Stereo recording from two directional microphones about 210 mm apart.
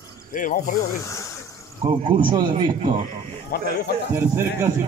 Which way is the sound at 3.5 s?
45° left (ahead or behind).